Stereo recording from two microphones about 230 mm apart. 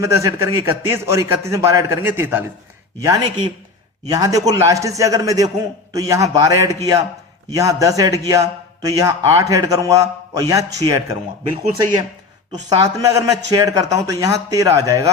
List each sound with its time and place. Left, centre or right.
0.0 s a man's voice: centre
12.5 s a man's voice: centre